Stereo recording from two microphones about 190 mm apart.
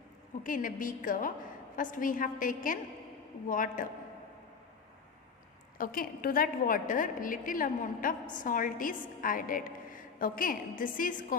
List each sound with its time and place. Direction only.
0.4 s a woman's voice: 45° left (ahead or behind)
5.7 s a woman's voice: 50° left (ahead or behind)